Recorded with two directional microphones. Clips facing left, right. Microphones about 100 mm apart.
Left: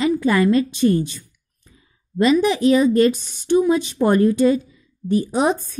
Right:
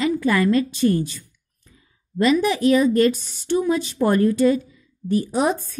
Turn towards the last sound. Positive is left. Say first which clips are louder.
# left 2 dB
turn(degrees=20)  # may be behind; listen again after turning